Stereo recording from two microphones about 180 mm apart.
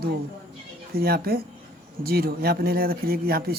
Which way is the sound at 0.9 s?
60° right (ahead or behind).